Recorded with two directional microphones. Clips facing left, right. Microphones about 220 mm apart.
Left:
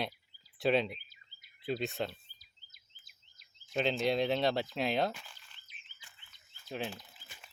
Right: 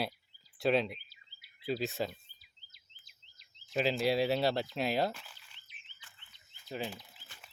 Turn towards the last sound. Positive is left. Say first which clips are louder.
# even
turn(degrees=0)  # may be behind; listen again after turning